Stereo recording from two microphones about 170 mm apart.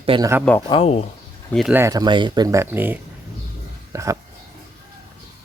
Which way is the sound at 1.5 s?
5° right (ahead or behind).